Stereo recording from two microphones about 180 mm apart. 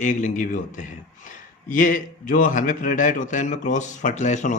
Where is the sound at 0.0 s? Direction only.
45° left (ahead or behind).